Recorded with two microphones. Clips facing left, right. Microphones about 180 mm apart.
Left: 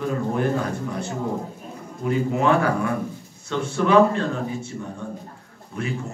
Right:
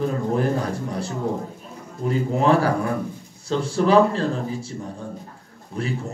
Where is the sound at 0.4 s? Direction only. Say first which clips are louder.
Even; 35° right (ahead or behind).